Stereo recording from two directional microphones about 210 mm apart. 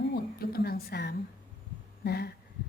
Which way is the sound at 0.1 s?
45° left (ahead or behind).